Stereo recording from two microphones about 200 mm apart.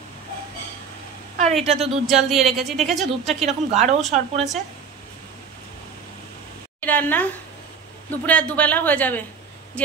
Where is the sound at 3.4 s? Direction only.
35° right (ahead or behind).